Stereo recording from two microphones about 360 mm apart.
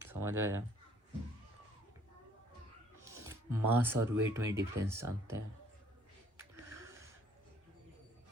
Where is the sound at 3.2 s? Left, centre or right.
Centre.